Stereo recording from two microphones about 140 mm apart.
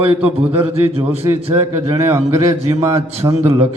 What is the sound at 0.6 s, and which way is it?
Speech, 45° right (ahead or behind).